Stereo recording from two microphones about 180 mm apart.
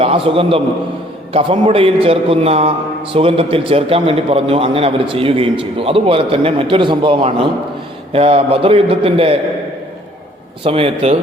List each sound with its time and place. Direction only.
0.0 s a man's voice: 30° right (ahead or behind)
10.6 s a man's voice: 30° right (ahead or behind)